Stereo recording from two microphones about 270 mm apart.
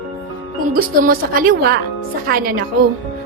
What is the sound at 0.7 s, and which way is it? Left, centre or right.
A woman's voice, right.